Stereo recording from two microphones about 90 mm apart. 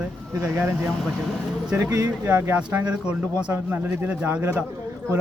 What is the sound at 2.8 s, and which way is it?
A man's voice, 15° right (ahead or behind).